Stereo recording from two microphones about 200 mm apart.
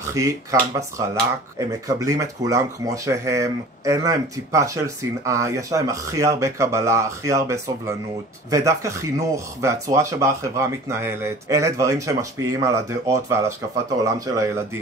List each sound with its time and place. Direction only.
0.1 s speech: 15° right (ahead or behind)